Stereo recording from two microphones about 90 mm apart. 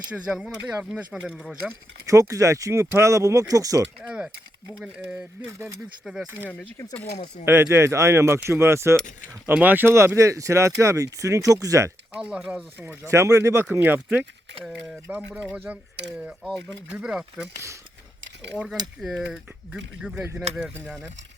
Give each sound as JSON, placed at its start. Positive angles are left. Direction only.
{"t": 0.3, "sound": "speech", "side_deg": -10}
{"t": 1.4, "sound": "speech", "side_deg": 0}
{"t": 2.0, "sound": "speech", "side_deg": -35}
{"t": 4.8, "sound": "speech", "side_deg": -10}
{"t": 5.5, "sound": "speech", "side_deg": -30}
{"t": 7.4, "sound": "speech", "side_deg": -30}
{"t": 9.5, "sound": "speech", "side_deg": -20}
{"t": 12.1, "sound": "speech", "side_deg": -10}
{"t": 12.8, "sound": "speech", "side_deg": -30}
{"t": 13.7, "sound": "speech", "side_deg": -20}
{"t": 18.8, "sound": "mechanisms", "side_deg": -50}
{"t": 19.2, "sound": "speech", "side_deg": -15}